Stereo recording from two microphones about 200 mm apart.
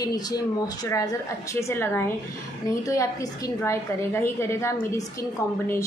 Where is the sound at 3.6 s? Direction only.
15° left (ahead or behind).